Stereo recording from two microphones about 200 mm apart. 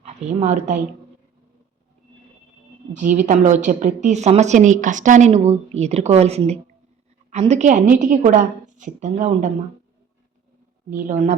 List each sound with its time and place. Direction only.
0.0 s a woman's voice: 35° right (ahead or behind)
3.2 s a woman's voice: 35° right (ahead or behind)
10.8 s a woman's voice: 40° right (ahead or behind)